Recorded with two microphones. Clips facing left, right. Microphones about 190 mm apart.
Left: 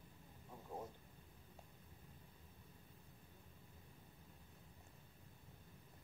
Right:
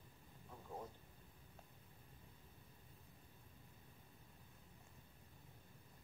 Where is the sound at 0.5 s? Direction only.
10° left (ahead or behind).